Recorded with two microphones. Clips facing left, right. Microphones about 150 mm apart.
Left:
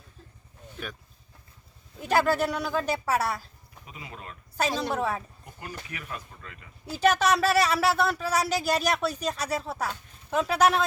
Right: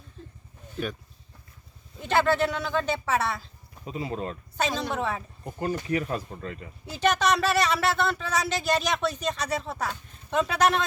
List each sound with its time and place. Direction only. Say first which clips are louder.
2.0 s speech: right 1 dB; 5° left (ahead or behind)
3.8 s speech: right 12 dB; 35° right (ahead or behind)
4.5 s a woman's voice: left 1 dB; 5° left (ahead or behind)
5.5 s speech: right 13 dB; 35° right (ahead or behind)
6.9 s speech: left 1 dB; 5° left (ahead or behind)